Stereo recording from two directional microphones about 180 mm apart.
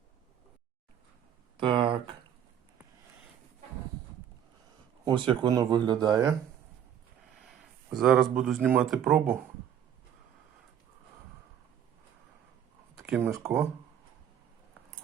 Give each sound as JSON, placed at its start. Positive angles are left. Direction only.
{"t": 1.5, "sound": "a sound", "side_deg": -30}
{"t": 5.0, "sound": "speech", "side_deg": -25}
{"t": 7.9, "sound": "a man's voice", "side_deg": -5}
{"t": 13.1, "sound": "speech", "side_deg": -10}